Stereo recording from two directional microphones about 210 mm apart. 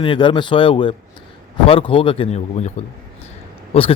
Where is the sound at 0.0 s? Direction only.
25° left (ahead or behind).